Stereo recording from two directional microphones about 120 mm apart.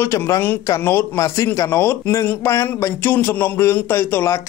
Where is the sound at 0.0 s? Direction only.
25° left (ahead or behind).